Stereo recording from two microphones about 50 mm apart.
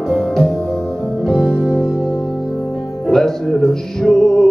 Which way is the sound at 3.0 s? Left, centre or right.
Centre.